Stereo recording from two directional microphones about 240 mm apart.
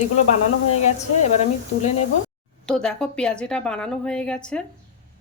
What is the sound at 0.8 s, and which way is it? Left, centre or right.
Speech, left.